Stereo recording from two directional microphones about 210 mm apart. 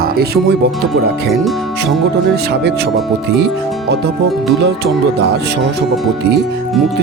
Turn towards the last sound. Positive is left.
turn(degrees=-55)  # may be behind; listen again after turning